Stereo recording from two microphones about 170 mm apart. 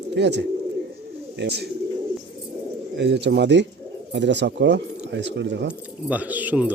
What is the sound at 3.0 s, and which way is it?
Speech, 90° right.